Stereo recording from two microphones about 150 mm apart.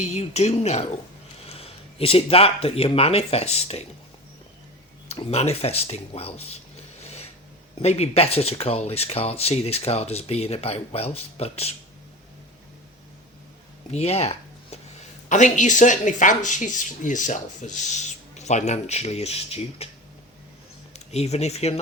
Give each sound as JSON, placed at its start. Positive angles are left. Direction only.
{"t": 0.0, "sound": "speech", "side_deg": 50}
{"t": 5.0, "sound": "speech", "side_deg": 45}
{"t": 7.0, "sound": "vehicle", "side_deg": 45}
{"t": 7.8, "sound": "speech", "side_deg": 45}
{"t": 13.9, "sound": "speech", "side_deg": 45}
{"t": 15.3, "sound": "speech", "side_deg": 55}
{"t": 20.9, "sound": "speech", "side_deg": 45}